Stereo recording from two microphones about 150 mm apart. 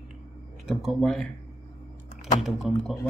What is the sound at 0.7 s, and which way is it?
Speech, centre (ahead or behind).